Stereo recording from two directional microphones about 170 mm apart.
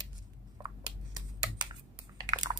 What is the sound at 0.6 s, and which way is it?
Computer keyboard, 25° right (ahead or behind).